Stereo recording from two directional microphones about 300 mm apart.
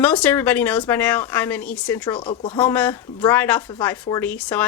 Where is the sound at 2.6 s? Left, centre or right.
Centre.